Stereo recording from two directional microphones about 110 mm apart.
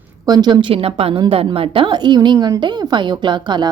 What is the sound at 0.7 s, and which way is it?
A woman's voice, 60° right (ahead or behind).